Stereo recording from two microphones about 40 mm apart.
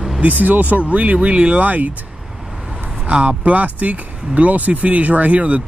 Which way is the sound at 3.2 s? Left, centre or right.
Right.